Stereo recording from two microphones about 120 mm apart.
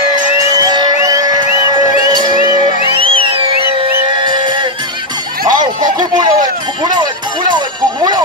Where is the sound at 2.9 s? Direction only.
50° right (ahead or behind).